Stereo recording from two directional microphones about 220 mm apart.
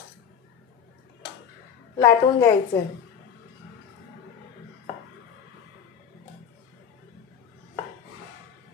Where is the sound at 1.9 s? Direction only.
15° left (ahead or behind).